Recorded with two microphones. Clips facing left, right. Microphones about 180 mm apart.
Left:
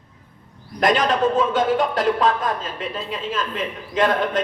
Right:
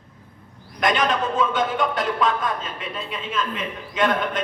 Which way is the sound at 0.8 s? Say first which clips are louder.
Left 3 dB; 35° left (ahead or behind).